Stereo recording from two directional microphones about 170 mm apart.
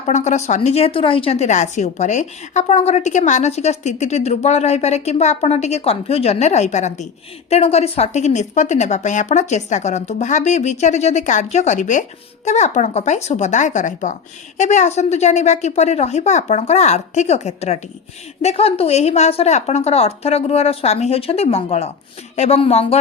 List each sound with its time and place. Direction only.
0.0 s a woman's voice: 40° left (ahead or behind)